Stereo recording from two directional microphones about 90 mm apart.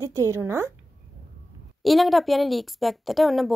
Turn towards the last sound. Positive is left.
turn(degrees=0)  # may be behind; listen again after turning